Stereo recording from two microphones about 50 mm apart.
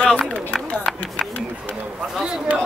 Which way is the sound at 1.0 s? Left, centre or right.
Left.